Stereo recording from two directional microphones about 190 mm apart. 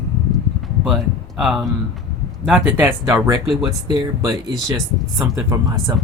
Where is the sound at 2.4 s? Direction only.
5° right (ahead or behind).